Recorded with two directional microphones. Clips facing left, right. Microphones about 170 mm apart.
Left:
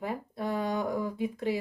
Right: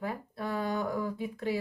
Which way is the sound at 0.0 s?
20° left (ahead or behind).